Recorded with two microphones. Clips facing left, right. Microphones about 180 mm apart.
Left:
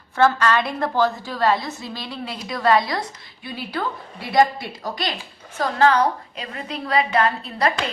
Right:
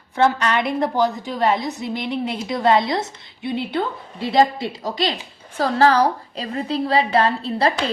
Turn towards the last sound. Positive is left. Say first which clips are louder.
# right 2 dB
turn(degrees=-30)  # may be behind; listen again after turning